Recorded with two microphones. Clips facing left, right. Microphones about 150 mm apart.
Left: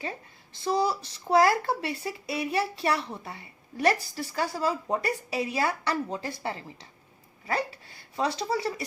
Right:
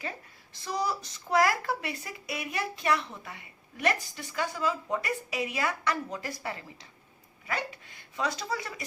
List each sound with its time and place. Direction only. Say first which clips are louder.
0.5 s speech: left 5 dB; 30° left (ahead or behind)